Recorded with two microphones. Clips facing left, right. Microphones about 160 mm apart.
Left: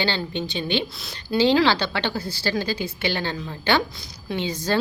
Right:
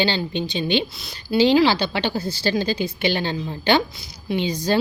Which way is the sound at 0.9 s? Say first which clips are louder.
Right 3 dB; 5° right (ahead or behind).